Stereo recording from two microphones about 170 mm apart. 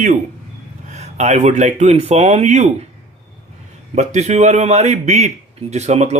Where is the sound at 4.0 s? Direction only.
40° right (ahead or behind).